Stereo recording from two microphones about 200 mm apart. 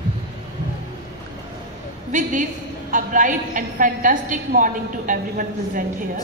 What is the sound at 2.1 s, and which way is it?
A woman's voice, 40° right (ahead or behind).